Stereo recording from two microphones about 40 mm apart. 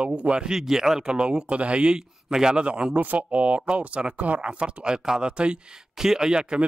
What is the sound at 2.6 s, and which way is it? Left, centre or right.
A man's voice, right.